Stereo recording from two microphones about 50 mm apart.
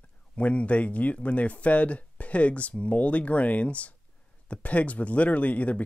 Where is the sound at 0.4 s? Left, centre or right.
Left.